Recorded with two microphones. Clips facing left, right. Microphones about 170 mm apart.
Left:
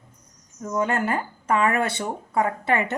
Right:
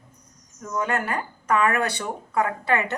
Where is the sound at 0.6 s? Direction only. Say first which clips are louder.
Left 2 dB; 25° left (ahead or behind).